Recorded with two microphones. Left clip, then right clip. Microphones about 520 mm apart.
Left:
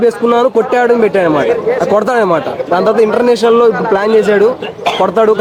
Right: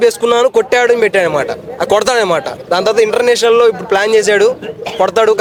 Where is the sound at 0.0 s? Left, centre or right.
Right.